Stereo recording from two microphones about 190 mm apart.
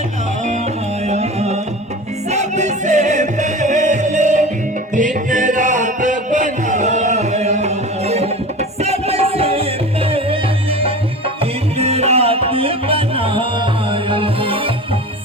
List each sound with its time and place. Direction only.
1.0 s music: 35° right (ahead or behind)